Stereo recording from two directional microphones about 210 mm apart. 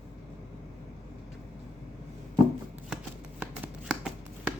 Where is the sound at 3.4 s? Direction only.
5° right (ahead or behind).